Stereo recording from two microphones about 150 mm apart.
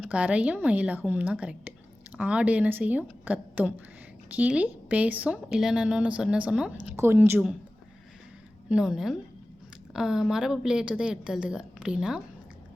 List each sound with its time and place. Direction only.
0.1 s speech: 10° right (ahead or behind)
8.7 s a woman's voice: 5° right (ahead or behind)